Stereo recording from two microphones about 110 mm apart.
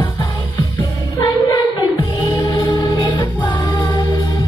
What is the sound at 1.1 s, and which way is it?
Music, 40° left (ahead or behind).